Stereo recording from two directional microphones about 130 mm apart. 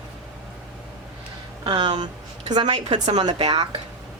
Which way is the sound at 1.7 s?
40° right (ahead or behind).